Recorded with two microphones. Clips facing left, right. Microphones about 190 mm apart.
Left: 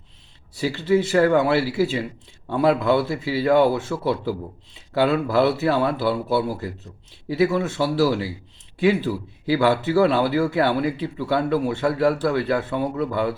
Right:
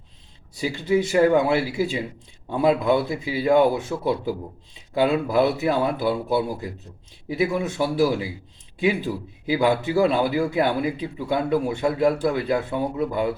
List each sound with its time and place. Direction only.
0.5 s a man's voice: 20° right (ahead or behind)